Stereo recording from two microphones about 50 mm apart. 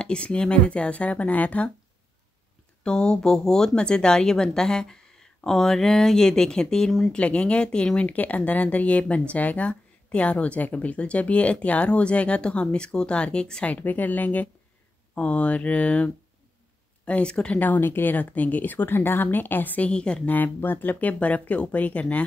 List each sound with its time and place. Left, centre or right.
0.0 s speech: centre
2.8 s speech: centre
7.1 s speech: left
8.1 s speech: left
13.7 s speech: left
17.7 s speech: left
18.1 s speech: left
19.9 s speech: centre
20.2 s speech: left